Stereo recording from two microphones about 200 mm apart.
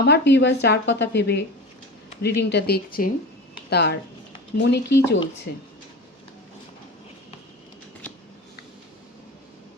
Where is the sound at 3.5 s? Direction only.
55° left (ahead or behind).